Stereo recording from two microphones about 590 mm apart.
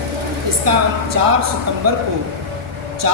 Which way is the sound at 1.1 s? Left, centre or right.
Right.